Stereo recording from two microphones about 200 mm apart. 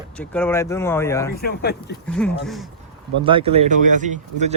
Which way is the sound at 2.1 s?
5° left (ahead or behind).